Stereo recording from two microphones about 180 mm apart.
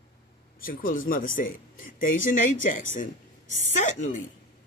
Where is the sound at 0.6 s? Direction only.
50° left (ahead or behind).